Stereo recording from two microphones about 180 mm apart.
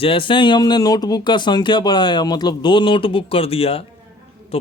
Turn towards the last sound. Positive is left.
turn(degrees=30)  # may be behind; listen again after turning